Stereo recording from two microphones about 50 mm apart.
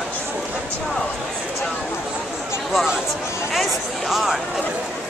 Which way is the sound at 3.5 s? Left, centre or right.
Centre.